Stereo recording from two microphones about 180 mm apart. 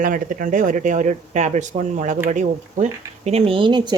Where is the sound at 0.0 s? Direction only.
50° right (ahead or behind).